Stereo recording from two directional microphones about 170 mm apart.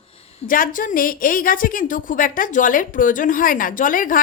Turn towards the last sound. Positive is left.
turn(degrees=50)  # may be behind; listen again after turning